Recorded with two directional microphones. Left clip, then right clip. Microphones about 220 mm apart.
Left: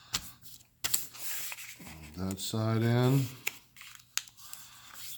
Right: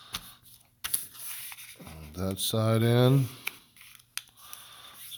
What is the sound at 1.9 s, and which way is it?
Speech, 45° right (ahead or behind).